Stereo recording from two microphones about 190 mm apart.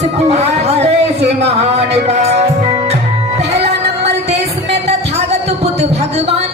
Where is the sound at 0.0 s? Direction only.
35° right (ahead or behind).